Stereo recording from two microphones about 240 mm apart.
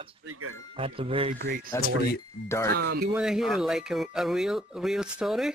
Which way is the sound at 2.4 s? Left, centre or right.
Centre.